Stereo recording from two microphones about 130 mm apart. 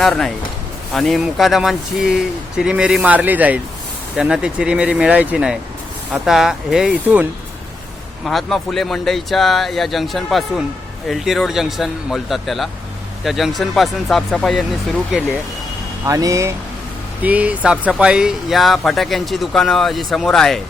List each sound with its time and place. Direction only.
0.0 s speech: centre (ahead or behind)
16.0 s speech: 25° right (ahead or behind)
17.2 s speech: 10° right (ahead or behind)